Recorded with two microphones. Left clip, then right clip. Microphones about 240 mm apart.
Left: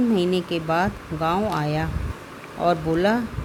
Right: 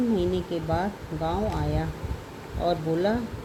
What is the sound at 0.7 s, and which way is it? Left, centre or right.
Speech, left.